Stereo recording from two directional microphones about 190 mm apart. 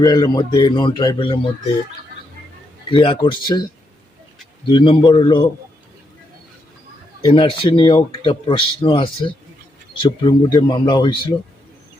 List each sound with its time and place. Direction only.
0.0 s speech: 20° left (ahead or behind)
2.9 s speech: 25° left (ahead or behind)
4.6 s speech: 25° left (ahead or behind)
7.2 s speech: 25° left (ahead or behind)